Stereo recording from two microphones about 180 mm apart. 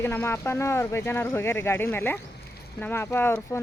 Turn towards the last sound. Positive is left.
turn(degrees=10)  # may be behind; listen again after turning